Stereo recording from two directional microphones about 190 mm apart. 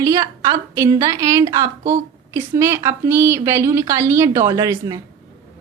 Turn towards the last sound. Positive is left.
turn(degrees=-20)  # may be behind; listen again after turning